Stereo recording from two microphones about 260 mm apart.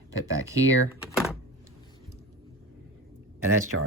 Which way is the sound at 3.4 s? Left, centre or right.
Right.